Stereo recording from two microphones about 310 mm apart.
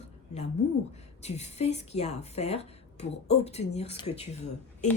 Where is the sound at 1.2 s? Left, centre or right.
Left.